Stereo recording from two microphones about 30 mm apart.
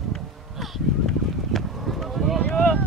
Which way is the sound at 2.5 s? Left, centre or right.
Left.